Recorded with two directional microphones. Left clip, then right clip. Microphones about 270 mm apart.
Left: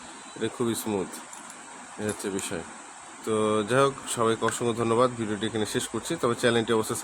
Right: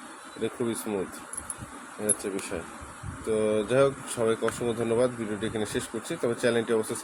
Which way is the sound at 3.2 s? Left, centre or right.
Centre.